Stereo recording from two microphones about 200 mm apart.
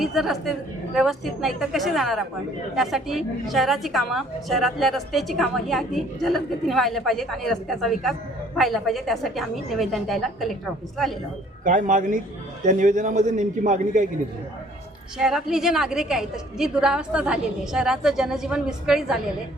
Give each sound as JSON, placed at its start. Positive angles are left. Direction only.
{"t": 0.0, "sound": "a woman's voice", "side_deg": 0}
{"t": 11.6, "sound": "a man's voice", "side_deg": -40}
{"t": 15.2, "sound": "a woman's voice", "side_deg": 0}